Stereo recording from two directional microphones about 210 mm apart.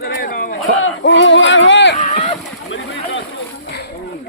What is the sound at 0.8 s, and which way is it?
Speech, 60° left (ahead or behind).